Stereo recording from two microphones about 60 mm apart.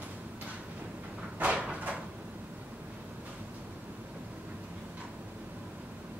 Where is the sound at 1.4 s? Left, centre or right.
Right.